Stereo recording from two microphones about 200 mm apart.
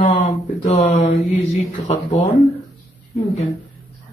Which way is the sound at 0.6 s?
35° left (ahead or behind).